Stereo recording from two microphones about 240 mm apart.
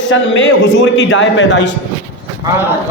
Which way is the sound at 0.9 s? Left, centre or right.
Left.